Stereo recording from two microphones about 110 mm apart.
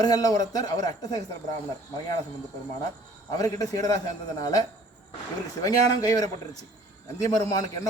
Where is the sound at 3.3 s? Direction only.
30° left (ahead or behind).